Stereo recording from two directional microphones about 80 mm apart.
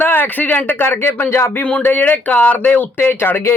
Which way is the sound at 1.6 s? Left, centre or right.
Centre.